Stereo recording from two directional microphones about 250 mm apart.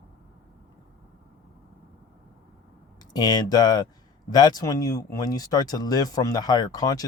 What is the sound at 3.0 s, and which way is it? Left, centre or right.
Speech, centre.